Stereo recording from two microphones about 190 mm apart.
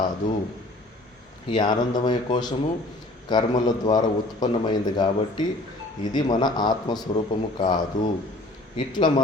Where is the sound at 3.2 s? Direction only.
20° left (ahead or behind).